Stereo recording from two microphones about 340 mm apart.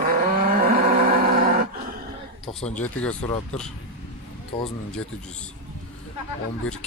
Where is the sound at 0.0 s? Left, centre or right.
Right.